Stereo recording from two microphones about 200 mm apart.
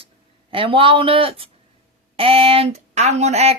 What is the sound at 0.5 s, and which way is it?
Speech, 25° right (ahead or behind).